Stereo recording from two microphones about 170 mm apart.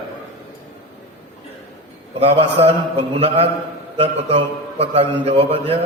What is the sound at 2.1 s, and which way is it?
A man's voice, 35° right (ahead or behind).